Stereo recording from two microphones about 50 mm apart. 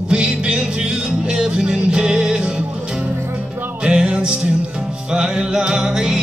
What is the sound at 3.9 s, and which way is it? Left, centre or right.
Music, centre.